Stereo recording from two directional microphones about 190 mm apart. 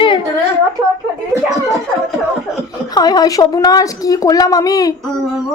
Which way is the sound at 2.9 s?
20° left (ahead or behind).